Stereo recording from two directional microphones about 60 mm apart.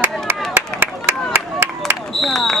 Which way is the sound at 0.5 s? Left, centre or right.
Right.